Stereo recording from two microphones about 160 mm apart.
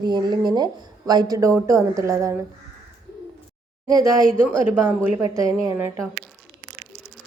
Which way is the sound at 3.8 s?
20° right (ahead or behind).